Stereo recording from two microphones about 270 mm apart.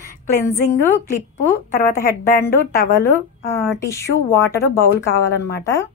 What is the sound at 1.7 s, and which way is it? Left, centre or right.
Speech, left.